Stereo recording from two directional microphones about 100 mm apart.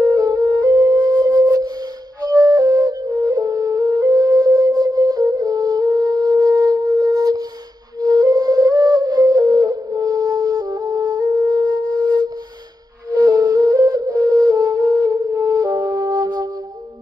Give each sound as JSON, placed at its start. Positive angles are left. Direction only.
{"t": 0.0, "sound": "flute", "side_deg": -40}
{"t": 1.2, "sound": "music", "side_deg": -45}
{"t": 2.2, "sound": "flute", "side_deg": -40}
{"t": 15.5, "sound": "music", "side_deg": -40}